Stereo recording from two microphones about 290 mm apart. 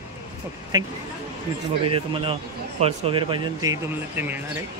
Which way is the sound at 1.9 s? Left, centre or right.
Centre.